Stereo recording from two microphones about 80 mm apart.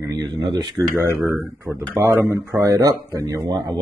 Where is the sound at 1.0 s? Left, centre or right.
Right.